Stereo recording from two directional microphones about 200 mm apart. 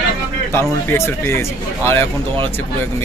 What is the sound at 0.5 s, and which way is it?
Speech, 10° left (ahead or behind).